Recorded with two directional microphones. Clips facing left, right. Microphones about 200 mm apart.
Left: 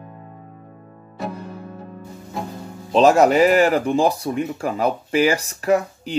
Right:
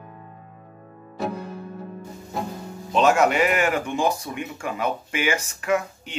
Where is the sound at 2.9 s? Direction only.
35° left (ahead or behind).